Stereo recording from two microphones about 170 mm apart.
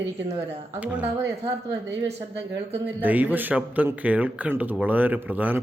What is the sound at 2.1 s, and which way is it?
Speech, 35° right (ahead or behind).